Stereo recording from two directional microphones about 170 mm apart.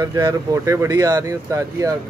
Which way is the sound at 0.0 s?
20° right (ahead or behind).